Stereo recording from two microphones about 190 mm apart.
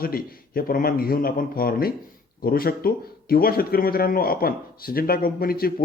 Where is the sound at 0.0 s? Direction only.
50° left (ahead or behind).